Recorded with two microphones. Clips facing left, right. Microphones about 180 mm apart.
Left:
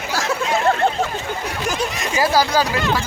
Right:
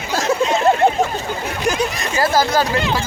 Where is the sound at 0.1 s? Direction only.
20° right (ahead or behind).